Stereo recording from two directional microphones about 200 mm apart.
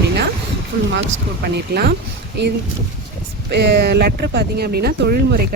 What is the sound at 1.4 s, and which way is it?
Speech, 50° right (ahead or behind).